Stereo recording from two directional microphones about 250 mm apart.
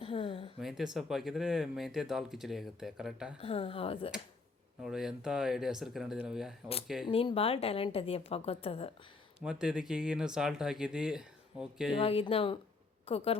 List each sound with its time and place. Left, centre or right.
0.0 s speech: left
0.6 s speech: centre
3.4 s a woman's voice: left
4.8 s speech: centre
7.1 s a woman's voice: left
9.4 s speech: centre
11.9 s a woman's voice: left